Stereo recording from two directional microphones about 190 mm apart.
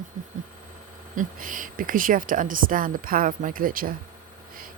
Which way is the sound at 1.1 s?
45° right (ahead or behind).